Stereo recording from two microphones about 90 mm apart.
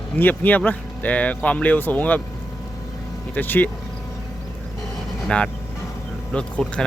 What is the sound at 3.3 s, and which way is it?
Speech, 20° left (ahead or behind).